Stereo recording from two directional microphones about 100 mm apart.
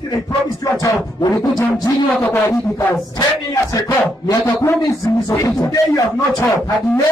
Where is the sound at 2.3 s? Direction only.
30° left (ahead or behind).